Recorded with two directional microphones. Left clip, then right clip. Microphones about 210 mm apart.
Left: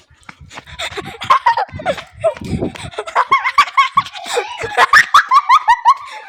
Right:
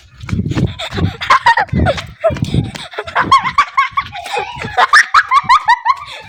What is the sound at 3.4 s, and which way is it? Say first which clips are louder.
Fowl: left 1 dB; 25° left (ahead or behind).